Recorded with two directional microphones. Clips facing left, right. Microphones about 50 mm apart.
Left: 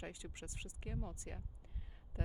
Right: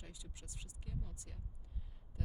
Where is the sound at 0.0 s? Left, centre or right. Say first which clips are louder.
Left 8 dB; left.